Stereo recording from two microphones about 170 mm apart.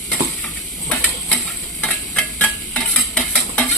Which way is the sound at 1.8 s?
5° left (ahead or behind).